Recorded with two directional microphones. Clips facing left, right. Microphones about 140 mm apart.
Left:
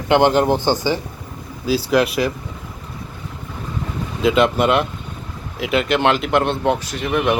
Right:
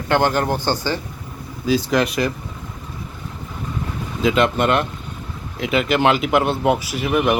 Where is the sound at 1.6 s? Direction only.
5° left (ahead or behind).